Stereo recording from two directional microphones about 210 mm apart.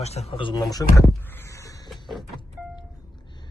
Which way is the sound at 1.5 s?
15° left (ahead or behind).